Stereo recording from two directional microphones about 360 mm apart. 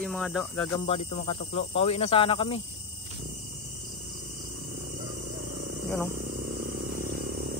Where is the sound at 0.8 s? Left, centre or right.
Centre.